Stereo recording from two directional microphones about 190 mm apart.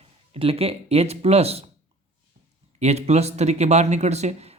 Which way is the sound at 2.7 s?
35° right (ahead or behind).